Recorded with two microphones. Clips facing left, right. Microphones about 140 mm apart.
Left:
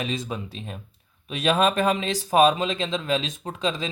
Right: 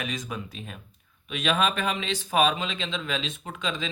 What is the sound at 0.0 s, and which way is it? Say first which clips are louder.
Speech: left 4 dB; 30° left (ahead or behind).